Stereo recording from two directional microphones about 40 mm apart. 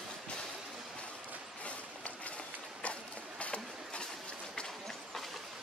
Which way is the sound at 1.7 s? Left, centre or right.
Left.